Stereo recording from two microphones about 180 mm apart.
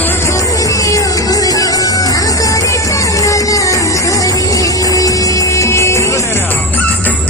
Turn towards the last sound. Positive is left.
turn(degrees=10)  # may be behind; listen again after turning